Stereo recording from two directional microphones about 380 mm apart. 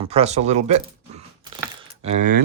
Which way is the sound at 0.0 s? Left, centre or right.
Centre.